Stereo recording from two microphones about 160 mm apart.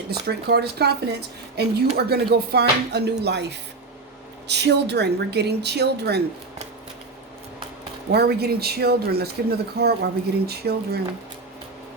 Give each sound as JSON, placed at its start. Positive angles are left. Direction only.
{"t": 0.3, "sound": "speech", "side_deg": -90}
{"t": 4.4, "sound": "speech", "side_deg": -90}
{"t": 8.1, "sound": "speech", "side_deg": -85}